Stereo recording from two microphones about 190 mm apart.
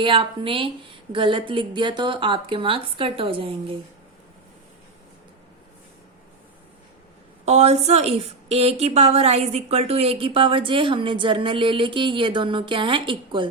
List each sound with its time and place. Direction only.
0.0 s a woman's voice: 25° right (ahead or behind)
7.4 s a woman's voice: 35° right (ahead or behind)